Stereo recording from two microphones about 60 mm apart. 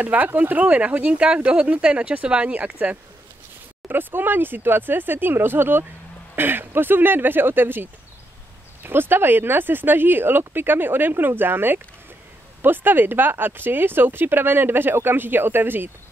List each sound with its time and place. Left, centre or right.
0.0 s speech: right
3.9 s speech: right